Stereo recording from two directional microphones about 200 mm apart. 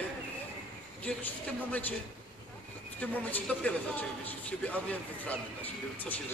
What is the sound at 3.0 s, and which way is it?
A man's voice, 5° left (ahead or behind).